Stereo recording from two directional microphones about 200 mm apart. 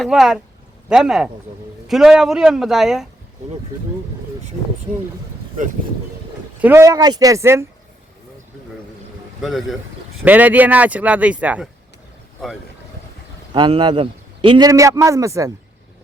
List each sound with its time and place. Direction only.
0.0 s speech: centre (ahead or behind)
6.6 s speech: 10° right (ahead or behind)
9.4 s speech: centre (ahead or behind)
13.5 s a man's voice: 25° right (ahead or behind)